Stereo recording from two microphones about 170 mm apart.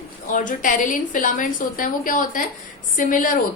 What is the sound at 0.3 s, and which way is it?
A woman's voice, 50° left (ahead or behind).